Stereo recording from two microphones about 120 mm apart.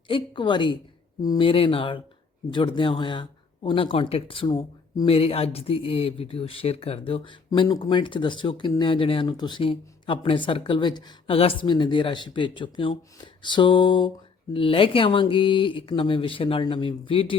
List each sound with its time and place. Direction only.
0.1 s speech: 45° left (ahead or behind)
1.2 s speech: 30° left (ahead or behind)
1.5 s speech: 50° left (ahead or behind)
4.4 s speech: 35° left (ahead or behind)
11.3 s speech: 50° left (ahead or behind)